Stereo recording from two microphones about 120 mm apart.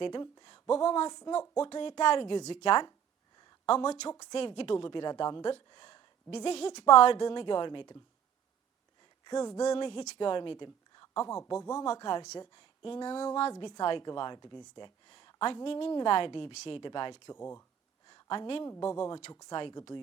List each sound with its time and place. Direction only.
0.0 s speech: 40° left (ahead or behind)
0.7 s a woman's voice: 50° left (ahead or behind)
4.1 s speech: 30° left (ahead or behind)
4.4 s a woman's voice: 50° left (ahead or behind)
6.3 s a woman's voice: 60° left (ahead or behind); by 7.9 s 45° left (ahead or behind)
9.2 s speech: 35° left (ahead or behind)
9.7 s a woman's voice: 45° left (ahead or behind)
11.9 s a woman's voice: 45° left (ahead or behind)
13.6 s a woman's voice: 40° left (ahead or behind)
17.3 s speech: 20° left (ahead or behind)
18.1 s a sound: 40° left (ahead or behind)
18.8 s speech: 35° left (ahead or behind)
19.5 s speech: 45° left (ahead or behind)